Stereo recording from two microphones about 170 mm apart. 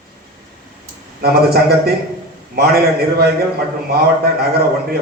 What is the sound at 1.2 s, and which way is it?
A man's voice, 65° right (ahead or behind).